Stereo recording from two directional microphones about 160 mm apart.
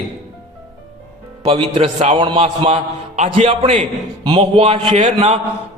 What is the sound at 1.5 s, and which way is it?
A man's voice, 35° right (ahead or behind).